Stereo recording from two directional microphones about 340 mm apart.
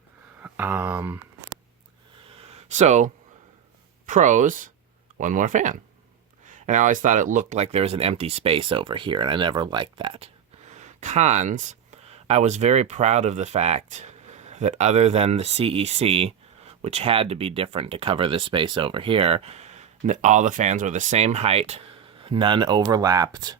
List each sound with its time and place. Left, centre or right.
0.4 s speech: centre
2.5 s a sound: centre
4.0 s speech: right